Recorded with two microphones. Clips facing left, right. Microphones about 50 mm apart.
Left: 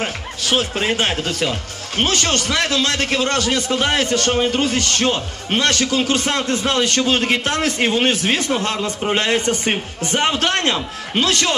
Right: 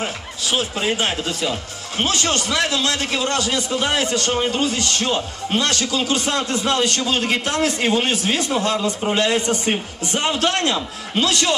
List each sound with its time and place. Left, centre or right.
0.0 s speech: left